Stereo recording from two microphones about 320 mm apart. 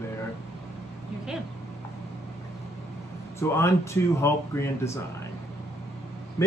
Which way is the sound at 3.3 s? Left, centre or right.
Centre.